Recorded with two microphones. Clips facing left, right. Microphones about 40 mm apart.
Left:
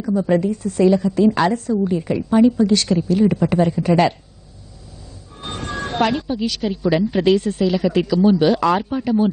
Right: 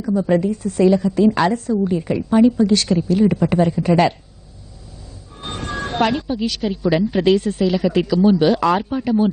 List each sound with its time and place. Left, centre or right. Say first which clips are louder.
0.0 s speech: even; centre
5.4 s speech: right 1 dB; centre